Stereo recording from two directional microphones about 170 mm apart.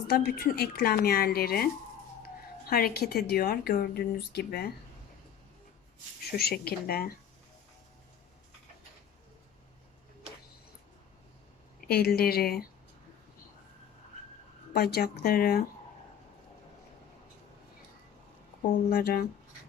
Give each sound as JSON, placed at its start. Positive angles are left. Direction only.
{"t": 0.1, "sound": "a woman's voice", "side_deg": 65}
{"t": 6.3, "sound": "a woman's voice", "side_deg": 70}
{"t": 11.9, "sound": "a woman's voice", "side_deg": 65}
{"t": 14.7, "sound": "a woman's voice", "side_deg": 65}
{"t": 18.6, "sound": "a woman's voice", "side_deg": 60}